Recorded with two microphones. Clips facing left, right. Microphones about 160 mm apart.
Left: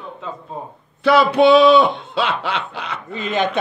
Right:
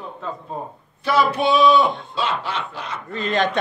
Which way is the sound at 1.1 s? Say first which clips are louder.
Left 6 dB; 70° left (ahead or behind).